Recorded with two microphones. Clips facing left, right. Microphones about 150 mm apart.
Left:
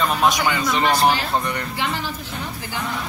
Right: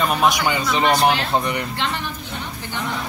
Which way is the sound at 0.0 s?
15° right (ahead or behind).